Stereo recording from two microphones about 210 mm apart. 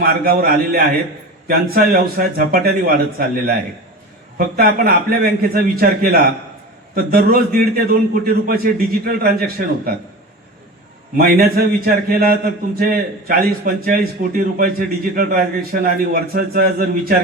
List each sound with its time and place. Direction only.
0.0 s a man's voice: 45° right (ahead or behind)
11.2 s a man's voice: 45° right (ahead or behind)